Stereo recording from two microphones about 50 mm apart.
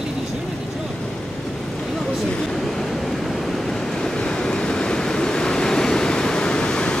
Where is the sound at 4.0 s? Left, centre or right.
Centre.